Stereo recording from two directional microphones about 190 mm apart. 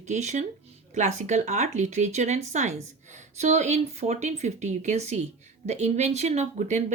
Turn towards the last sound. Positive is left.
turn(degrees=-40)  # may be behind; listen again after turning